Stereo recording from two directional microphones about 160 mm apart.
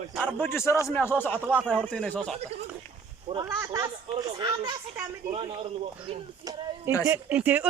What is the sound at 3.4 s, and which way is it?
Speech, 20° right (ahead or behind).